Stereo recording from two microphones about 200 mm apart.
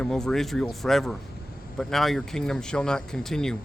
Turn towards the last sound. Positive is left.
turn(degrees=5)  # may be behind; listen again after turning